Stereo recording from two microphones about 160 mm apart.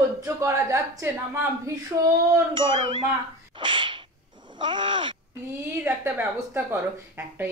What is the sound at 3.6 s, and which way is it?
Sneeze, 30° right (ahead or behind).